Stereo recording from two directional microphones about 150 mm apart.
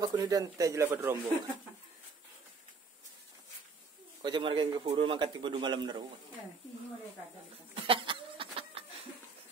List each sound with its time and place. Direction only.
0.0 s speech: 25° right (ahead or behind)
4.2 s speech: 30° right (ahead or behind)
7.7 s a sound: 35° right (ahead or behind)